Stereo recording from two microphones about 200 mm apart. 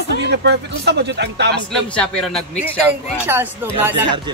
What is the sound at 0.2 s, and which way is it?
Speech, 55° right (ahead or behind).